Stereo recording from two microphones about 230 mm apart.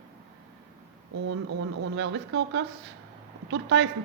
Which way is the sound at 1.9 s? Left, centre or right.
Right.